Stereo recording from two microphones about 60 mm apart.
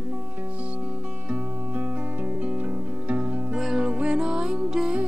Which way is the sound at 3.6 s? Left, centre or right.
Centre.